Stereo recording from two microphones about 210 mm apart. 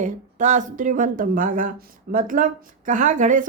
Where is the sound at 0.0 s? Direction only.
35° right (ahead or behind).